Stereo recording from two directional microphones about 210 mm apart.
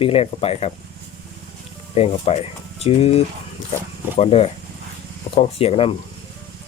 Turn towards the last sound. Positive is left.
turn(degrees=30)  # may be behind; listen again after turning